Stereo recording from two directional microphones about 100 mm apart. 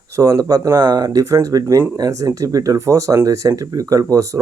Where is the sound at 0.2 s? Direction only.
35° right (ahead or behind).